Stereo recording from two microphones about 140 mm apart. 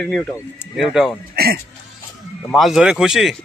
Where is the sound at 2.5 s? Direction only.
Centre (ahead or behind).